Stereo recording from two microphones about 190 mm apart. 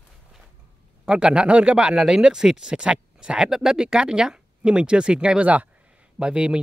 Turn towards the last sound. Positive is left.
turn(degrees=-5)  # may be behind; listen again after turning